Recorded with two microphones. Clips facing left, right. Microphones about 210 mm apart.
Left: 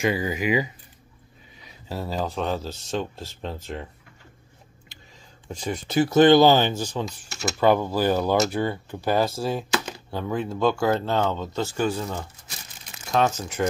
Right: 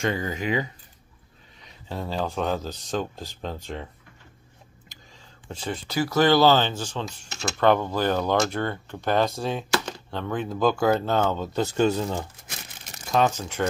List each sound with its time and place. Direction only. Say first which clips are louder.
0.0 s speech: left 3 dB; 10° left (ahead or behind)
5.5 s speech: left 2 dB; 10° left (ahead or behind)
5.9 s speech: left 5 dB; 25° left (ahead or behind); by 11.6 s 5° right (ahead or behind)
11.6 s speech: right 4 dB; 20° right (ahead or behind)
13.4 s speech: left 1 dB; 5° left (ahead or behind)